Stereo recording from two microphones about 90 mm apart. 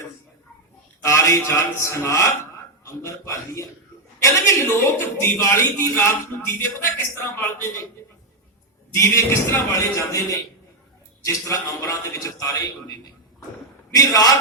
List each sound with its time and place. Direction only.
1.0 s a sound: 35° left (ahead or behind)
1.5 s a man's voice: 30° left (ahead or behind)
9.0 s a man's voice: 30° left (ahead or behind)
13.9 s speech: 45° left (ahead or behind)